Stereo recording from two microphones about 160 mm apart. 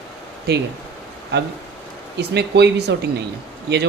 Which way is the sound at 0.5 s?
90° right.